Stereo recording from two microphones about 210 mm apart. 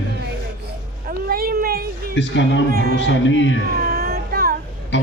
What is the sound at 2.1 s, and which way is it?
Speech, 60° left (ahead or behind).